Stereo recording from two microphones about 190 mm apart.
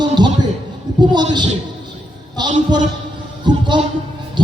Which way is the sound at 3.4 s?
25° right (ahead or behind).